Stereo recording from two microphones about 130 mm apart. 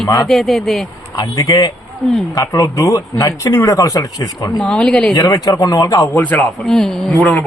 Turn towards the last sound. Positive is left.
turn(degrees=5)  # may be behind; listen again after turning